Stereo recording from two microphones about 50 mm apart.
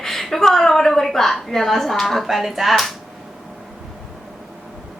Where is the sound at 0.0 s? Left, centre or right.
Centre.